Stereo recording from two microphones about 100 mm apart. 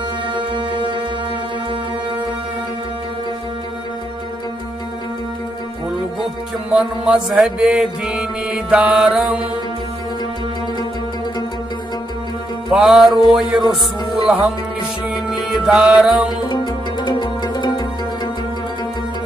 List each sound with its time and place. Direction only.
0.4 s music: 55° right (ahead or behind)
6.7 s mantra: 10° right (ahead or behind)
12.7 s music: 5° right (ahead or behind)
15.3 s music: 5° right (ahead or behind)
16.3 s music: 45° left (ahead or behind)